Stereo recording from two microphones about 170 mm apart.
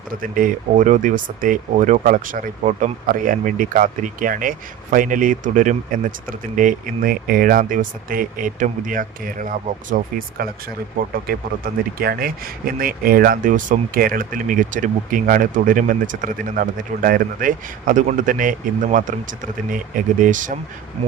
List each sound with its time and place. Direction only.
0.2 s speech: 55° right (ahead or behind)